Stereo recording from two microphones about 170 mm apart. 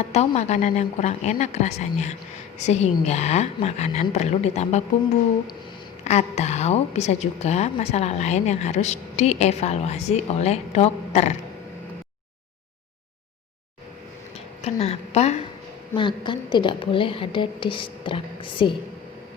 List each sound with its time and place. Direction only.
0.1 s a woman's voice: 40° left (ahead or behind)
6.1 s a woman's voice: 40° left (ahead or behind)
14.6 s a woman's voice: 40° left (ahead or behind)
16.0 s a woman's voice: 30° left (ahead or behind)